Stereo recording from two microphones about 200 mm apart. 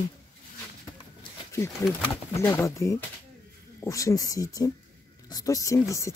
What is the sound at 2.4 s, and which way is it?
Speech, 15° left (ahead or behind).